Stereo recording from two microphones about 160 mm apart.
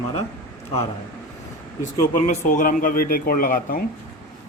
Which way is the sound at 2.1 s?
55° left (ahead or behind).